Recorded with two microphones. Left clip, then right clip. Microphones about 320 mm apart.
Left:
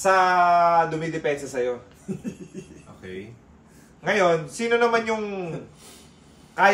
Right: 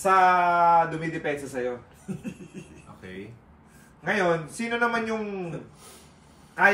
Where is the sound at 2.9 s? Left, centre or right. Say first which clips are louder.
Left 4 dB; centre.